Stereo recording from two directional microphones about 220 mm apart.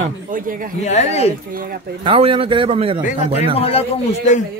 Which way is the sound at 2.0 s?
25° right (ahead or behind).